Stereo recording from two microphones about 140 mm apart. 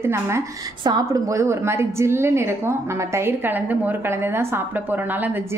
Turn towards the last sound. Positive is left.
turn(degrees=-15)  # may be behind; listen again after turning